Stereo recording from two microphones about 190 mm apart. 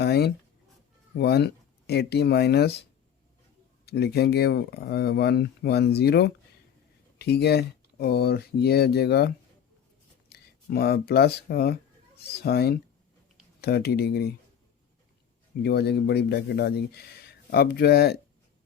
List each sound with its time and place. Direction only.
0.0 s a sound: 60° left (ahead or behind)
1.1 s speech: 55° left (ahead or behind)
3.8 s speech: 60° left (ahead or behind)
15.6 s speech: 60° left (ahead or behind)